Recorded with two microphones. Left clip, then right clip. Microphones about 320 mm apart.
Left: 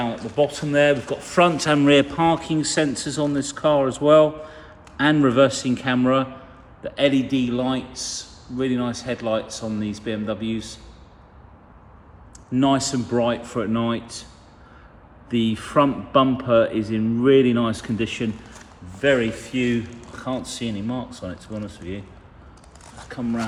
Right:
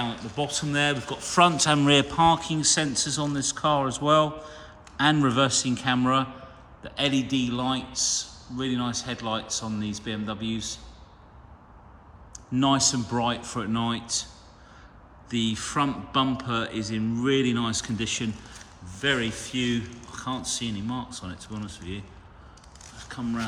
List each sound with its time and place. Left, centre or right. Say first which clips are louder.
0.0 s speech: left 8 dB; centre
12.3 s speech: left 4 dB; centre
15.3 s speech: left 5 dB; centre
23.0 s speech: left 5 dB; centre